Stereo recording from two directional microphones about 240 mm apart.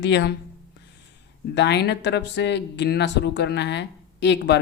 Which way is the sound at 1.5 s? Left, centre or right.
Left.